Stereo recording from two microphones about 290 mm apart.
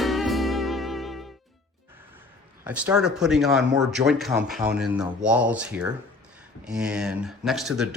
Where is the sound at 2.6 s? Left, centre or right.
Centre.